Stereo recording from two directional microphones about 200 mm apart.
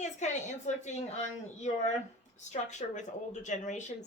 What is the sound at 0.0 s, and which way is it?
A woman's voice, 35° left (ahead or behind).